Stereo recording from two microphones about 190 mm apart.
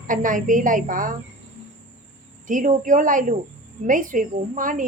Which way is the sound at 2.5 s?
45° right (ahead or behind).